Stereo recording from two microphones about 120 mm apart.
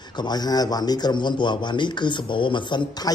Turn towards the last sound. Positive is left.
turn(degrees=35)  # may be behind; listen again after turning